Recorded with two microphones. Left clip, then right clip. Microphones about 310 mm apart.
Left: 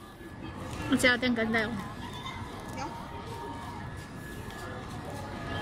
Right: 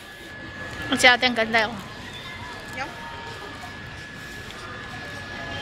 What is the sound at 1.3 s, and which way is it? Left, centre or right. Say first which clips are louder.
Speech: right 8 dB; right.